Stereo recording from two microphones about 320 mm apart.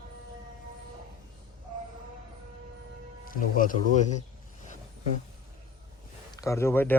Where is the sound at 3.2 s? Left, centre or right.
Left.